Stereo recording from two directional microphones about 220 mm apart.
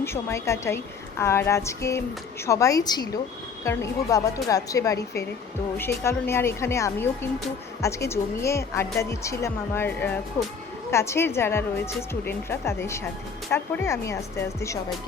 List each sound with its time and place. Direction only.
0.0 s speech: 10° left (ahead or behind)